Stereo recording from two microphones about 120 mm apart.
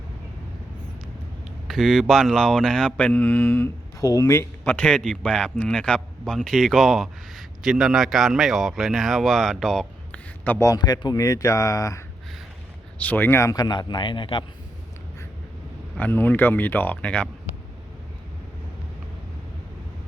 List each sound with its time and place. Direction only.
1.6 s speech: centre (ahead or behind)
10.4 s a man's voice: 15° left (ahead or behind)
10.7 s speech: 35° left (ahead or behind)
13.0 s a man's voice: 15° left (ahead or behind); by 14.4 s 45° left (ahead or behind)
16.0 s speech: 15° left (ahead or behind)